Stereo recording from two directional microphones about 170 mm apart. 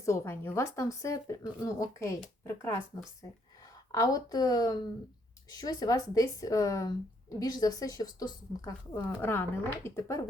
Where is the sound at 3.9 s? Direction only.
20° left (ahead or behind).